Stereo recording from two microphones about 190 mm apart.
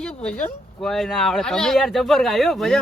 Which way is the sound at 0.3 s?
5° left (ahead or behind).